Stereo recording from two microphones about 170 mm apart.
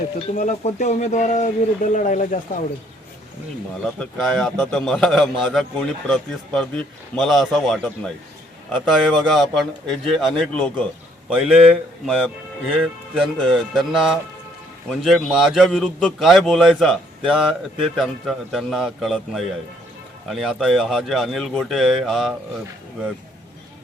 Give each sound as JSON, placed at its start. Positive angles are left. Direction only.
{"t": 0.2, "sound": "speech", "side_deg": 40}
{"t": 4.2, "sound": "a man's voice", "side_deg": 5}